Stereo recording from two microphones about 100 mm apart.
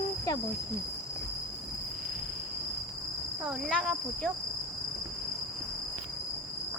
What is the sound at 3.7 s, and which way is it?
Speech, 5° left (ahead or behind).